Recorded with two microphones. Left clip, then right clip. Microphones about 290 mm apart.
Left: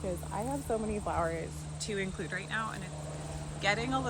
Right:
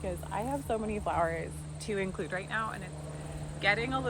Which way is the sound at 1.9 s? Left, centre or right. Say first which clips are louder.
Right 3 dB; centre.